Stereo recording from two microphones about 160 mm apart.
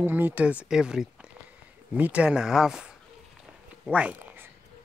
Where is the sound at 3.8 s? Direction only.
10° right (ahead or behind).